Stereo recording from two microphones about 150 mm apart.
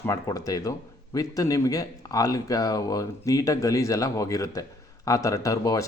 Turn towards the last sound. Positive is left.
turn(degrees=25)  # may be behind; listen again after turning